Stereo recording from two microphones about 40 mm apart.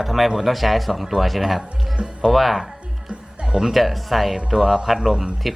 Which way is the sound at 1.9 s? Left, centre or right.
Right.